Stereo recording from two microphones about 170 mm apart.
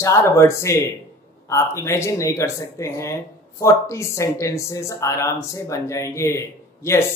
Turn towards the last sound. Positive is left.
turn(degrees=15)  # may be behind; listen again after turning